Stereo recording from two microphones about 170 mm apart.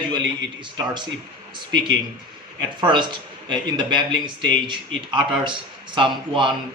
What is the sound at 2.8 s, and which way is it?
A man's voice, 25° right (ahead or behind).